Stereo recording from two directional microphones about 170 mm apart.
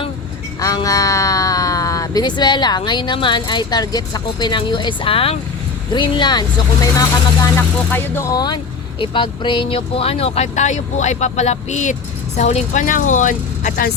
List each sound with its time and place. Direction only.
0.6 s speech: 20° left (ahead or behind); by 13.9 s 50° left (ahead or behind)